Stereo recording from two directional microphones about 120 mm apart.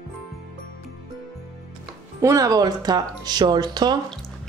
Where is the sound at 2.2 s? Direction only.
30° right (ahead or behind).